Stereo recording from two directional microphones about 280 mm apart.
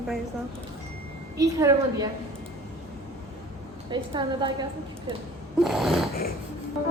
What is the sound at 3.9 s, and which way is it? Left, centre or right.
Speech, centre.